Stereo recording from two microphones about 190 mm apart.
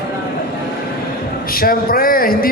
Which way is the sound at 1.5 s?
50° left (ahead or behind).